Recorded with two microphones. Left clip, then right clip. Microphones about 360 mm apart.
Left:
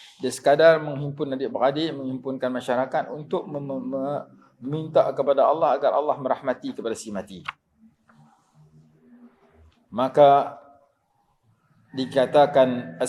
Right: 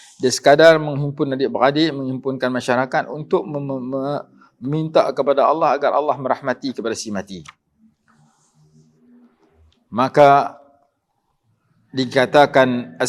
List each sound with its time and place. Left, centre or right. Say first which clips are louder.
0.2 s a man's voice: right 6 dB; right
9.9 s speech: right 4 dB; right
11.9 s speech: right 5 dB; right